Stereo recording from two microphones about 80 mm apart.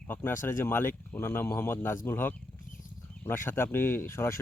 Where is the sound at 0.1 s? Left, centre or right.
Left.